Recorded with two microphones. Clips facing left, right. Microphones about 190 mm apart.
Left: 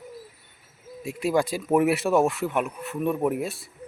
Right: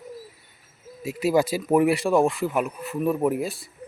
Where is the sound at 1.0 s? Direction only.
5° right (ahead or behind).